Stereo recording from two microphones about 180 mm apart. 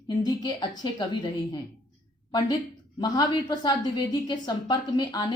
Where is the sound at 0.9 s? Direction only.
25° left (ahead or behind).